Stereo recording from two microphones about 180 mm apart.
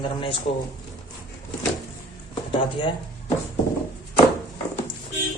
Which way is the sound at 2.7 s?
25° left (ahead or behind).